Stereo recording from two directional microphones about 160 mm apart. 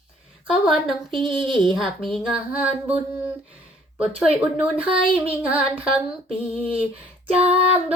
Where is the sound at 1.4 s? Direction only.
30° right (ahead or behind).